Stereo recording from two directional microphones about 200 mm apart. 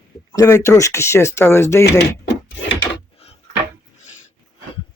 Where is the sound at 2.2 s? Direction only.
60° left (ahead or behind).